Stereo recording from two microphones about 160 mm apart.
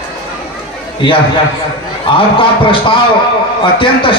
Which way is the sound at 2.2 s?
35° left (ahead or behind).